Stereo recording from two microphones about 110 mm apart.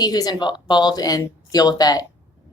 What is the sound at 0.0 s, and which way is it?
A woman's voice, 35° left (ahead or behind).